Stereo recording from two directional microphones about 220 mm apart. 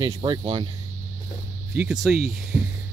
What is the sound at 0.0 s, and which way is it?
Speech, 20° right (ahead or behind).